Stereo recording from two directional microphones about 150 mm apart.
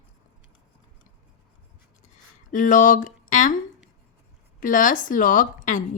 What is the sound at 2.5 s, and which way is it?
Speech, 60° left (ahead or behind).